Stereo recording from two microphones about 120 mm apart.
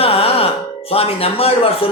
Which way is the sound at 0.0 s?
55° left (ahead or behind).